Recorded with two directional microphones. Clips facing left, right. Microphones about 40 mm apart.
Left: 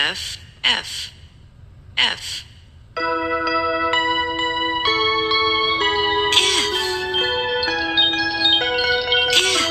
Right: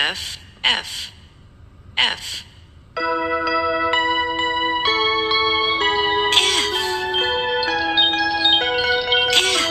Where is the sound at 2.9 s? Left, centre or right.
Centre.